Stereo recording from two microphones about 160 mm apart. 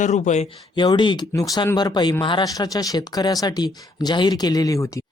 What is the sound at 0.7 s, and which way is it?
Speech, 30° left (ahead or behind).